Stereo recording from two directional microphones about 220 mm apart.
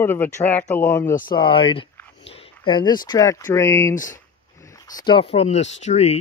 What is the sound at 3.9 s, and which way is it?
Speech, 35° left (ahead or behind).